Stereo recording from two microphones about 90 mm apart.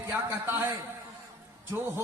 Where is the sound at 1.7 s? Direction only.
25° right (ahead or behind).